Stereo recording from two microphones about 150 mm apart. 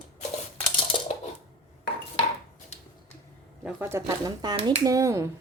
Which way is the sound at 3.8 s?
20° right (ahead or behind).